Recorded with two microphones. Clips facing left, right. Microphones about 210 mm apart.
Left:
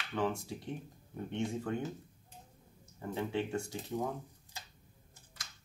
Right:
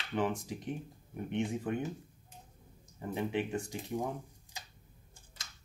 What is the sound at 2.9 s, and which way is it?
Speech, 15° right (ahead or behind).